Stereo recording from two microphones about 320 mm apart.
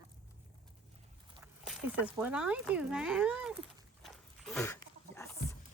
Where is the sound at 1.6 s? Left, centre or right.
Centre.